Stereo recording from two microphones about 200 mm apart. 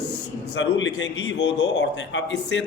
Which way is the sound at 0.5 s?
70° left (ahead or behind).